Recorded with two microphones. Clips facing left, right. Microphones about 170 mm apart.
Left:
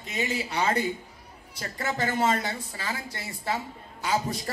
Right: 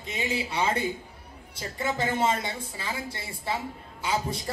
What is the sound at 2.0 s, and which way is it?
A woman's voice, 25° right (ahead or behind).